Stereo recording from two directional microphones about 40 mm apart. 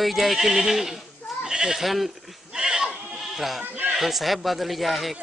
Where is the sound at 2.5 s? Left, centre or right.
Centre.